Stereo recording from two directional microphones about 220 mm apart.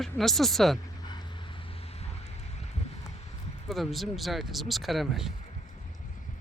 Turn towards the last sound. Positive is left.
turn(degrees=0)  # may be behind; listen again after turning